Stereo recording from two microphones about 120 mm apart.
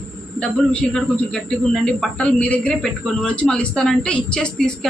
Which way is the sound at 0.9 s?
5° left (ahead or behind).